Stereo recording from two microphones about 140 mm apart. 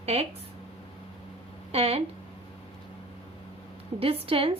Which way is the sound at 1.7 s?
45° right (ahead or behind).